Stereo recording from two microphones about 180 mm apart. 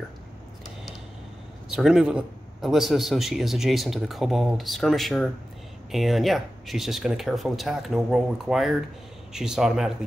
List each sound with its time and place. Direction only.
1.7 s a man's voice: centre (ahead or behind)